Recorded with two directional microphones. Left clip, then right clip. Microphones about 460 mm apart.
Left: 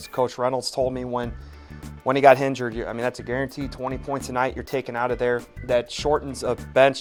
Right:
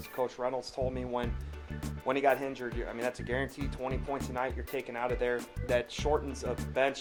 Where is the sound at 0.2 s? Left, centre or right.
Left.